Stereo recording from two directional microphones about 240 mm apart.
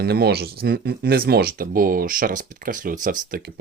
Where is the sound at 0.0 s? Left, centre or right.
Right.